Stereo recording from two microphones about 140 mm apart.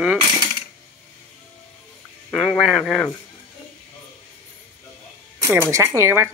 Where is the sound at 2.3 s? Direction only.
5° left (ahead or behind).